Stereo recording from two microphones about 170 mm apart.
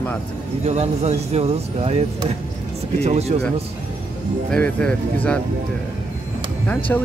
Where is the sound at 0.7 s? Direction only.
40° right (ahead or behind).